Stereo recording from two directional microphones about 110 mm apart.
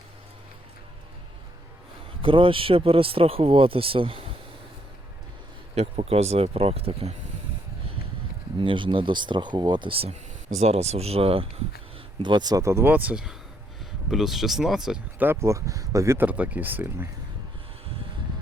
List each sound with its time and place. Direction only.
2.2 s speech: 55° right (ahead or behind)
5.7 s speech: 75° right (ahead or behind)
8.6 s speech: 50° right (ahead or behind)
12.2 s speech: 40° right (ahead or behind)
12.9 s speech: 10° right (ahead or behind)
15.2 s speech: 25° right (ahead or behind)